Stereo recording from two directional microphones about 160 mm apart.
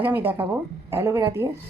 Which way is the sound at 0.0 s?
10° right (ahead or behind).